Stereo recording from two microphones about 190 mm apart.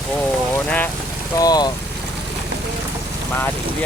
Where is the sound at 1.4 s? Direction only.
20° left (ahead or behind).